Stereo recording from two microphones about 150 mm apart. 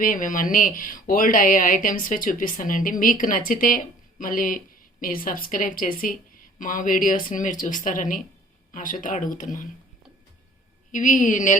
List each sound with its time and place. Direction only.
0.0 s speech: 65° left (ahead or behind)
10.9 s speech: 60° left (ahead or behind)